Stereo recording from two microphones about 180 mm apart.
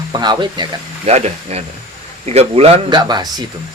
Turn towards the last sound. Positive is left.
turn(degrees=-25)  # may be behind; listen again after turning